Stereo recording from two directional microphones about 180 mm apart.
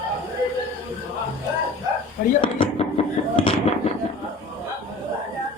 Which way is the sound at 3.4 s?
30° left (ahead or behind).